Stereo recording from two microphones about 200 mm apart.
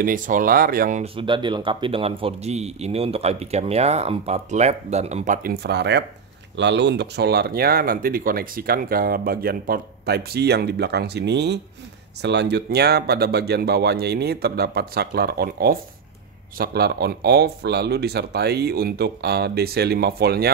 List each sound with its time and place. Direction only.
0.0 s speech: 40° right (ahead or behind)
1.0 s speech: 25° right (ahead or behind); by 20.5 s 50° right (ahead or behind)